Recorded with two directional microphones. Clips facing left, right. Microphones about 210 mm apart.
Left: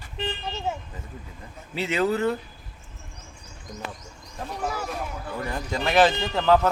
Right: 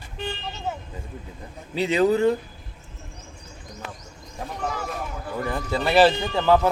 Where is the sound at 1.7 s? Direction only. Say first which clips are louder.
Right 4 dB; 15° right (ahead or behind).